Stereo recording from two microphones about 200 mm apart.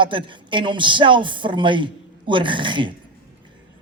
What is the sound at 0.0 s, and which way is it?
A woman's voice, 25° right (ahead or behind).